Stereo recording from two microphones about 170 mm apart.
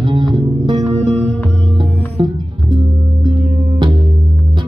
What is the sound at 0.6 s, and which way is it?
Music, 20° right (ahead or behind).